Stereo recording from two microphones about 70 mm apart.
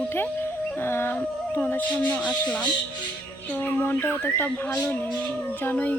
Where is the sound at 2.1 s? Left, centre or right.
Centre.